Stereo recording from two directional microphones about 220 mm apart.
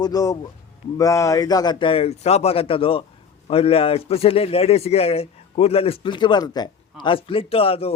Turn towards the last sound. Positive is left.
turn(degrees=25)  # may be behind; listen again after turning